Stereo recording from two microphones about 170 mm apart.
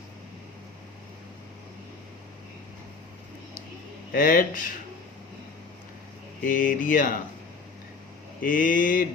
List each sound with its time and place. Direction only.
4.1 s mantra: 55° left (ahead or behind)
6.4 s mantra: 55° left (ahead or behind)
8.4 s mantra: 55° left (ahead or behind)